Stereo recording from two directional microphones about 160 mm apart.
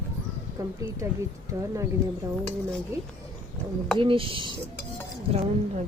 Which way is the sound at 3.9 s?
35° right (ahead or behind).